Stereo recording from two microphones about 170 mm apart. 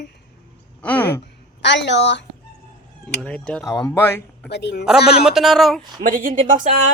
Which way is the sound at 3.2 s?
5° left (ahead or behind).